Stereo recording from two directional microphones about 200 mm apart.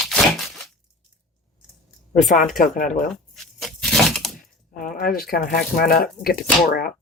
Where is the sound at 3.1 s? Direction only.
Centre (ahead or behind).